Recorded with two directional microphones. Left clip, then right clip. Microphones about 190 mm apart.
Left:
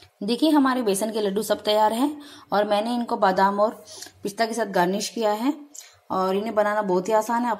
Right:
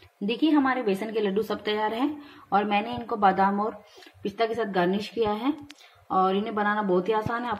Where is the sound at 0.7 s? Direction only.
35° left (ahead or behind).